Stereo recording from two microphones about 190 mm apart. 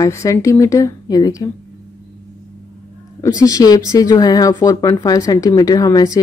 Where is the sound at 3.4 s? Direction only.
20° left (ahead or behind).